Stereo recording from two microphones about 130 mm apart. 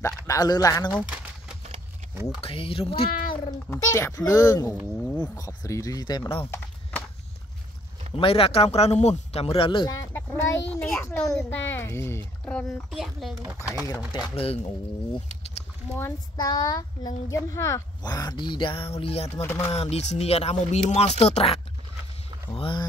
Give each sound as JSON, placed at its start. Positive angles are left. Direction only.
{"t": 0.0, "sound": "speech", "side_deg": 30}
{"t": 2.4, "sound": "speech", "side_deg": 45}
{"t": 3.1, "sound": "speech", "side_deg": 90}
{"t": 3.7, "sound": "a child's voice", "side_deg": 20}
{"t": 6.4, "sound": "horse", "side_deg": 15}
{"t": 8.2, "sound": "speech", "side_deg": 45}
{"t": 9.8, "sound": "a child's voice", "side_deg": 20}
{"t": 12.9, "sound": "speech", "side_deg": 0}
{"t": 14.3, "sound": "speech", "side_deg": 50}
{"t": 16.3, "sound": "speech", "side_deg": 30}
{"t": 19.4, "sound": "speech", "side_deg": 15}
{"t": 19.7, "sound": "speech", "side_deg": 55}
{"t": 22.6, "sound": "speech", "side_deg": 40}